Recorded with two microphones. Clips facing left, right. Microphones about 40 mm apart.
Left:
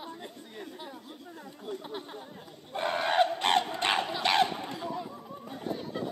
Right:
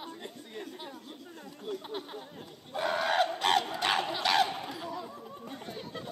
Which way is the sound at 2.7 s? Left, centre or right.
Centre.